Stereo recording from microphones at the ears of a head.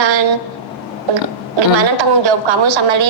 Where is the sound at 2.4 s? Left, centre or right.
Right.